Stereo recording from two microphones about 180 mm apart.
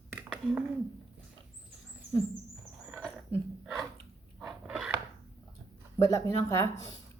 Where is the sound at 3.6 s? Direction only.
Centre (ahead or behind).